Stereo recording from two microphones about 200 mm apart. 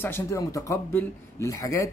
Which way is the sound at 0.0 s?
10° left (ahead or behind).